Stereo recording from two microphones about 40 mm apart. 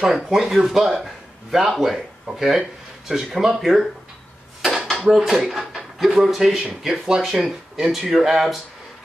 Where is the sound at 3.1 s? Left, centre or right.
Right.